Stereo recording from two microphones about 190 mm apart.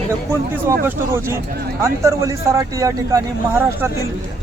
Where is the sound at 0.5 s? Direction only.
10° right (ahead or behind).